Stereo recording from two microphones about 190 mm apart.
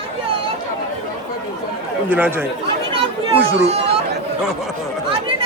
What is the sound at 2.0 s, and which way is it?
Speech, 10° right (ahead or behind).